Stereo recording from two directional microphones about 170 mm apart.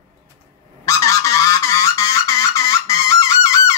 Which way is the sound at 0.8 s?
20° left (ahead or behind).